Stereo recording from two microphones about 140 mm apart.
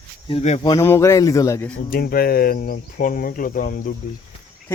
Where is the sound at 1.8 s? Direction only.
90° left.